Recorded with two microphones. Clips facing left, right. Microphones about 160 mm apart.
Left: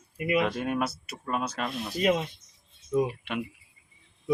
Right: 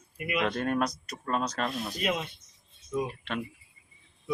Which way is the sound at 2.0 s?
30° left (ahead or behind).